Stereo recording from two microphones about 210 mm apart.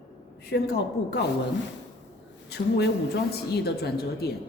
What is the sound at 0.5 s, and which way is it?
Speech, 55° left (ahead or behind).